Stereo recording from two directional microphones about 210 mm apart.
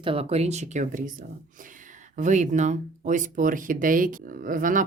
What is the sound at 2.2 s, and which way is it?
Speech, 35° right (ahead or behind).